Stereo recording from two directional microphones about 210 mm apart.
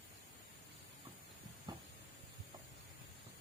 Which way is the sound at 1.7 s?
20° right (ahead or behind).